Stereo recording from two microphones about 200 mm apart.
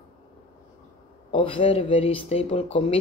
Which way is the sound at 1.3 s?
25° left (ahead or behind).